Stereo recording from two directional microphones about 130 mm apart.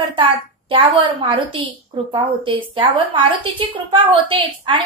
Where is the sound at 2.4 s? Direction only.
45° right (ahead or behind).